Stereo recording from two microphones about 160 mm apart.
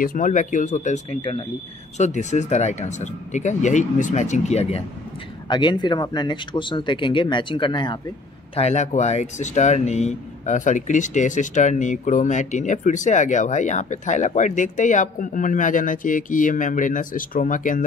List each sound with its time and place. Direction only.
0.0 s speech: 55° left (ahead or behind)
5.5 s speech: 30° left (ahead or behind)
8.5 s speech: 45° left (ahead or behind)